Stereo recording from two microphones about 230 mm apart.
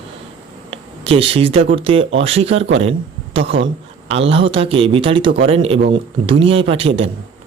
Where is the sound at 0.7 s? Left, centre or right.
Right.